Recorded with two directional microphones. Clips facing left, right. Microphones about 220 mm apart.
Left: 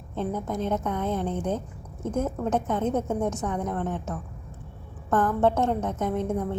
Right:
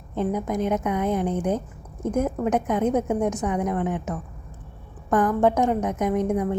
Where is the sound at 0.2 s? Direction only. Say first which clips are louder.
Right 4 dB; 15° right (ahead or behind).